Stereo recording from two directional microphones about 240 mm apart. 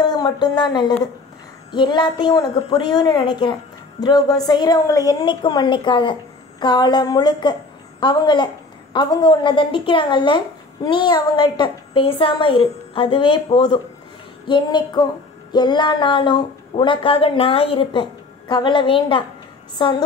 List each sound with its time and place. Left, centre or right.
0.0 s a woman's voice: centre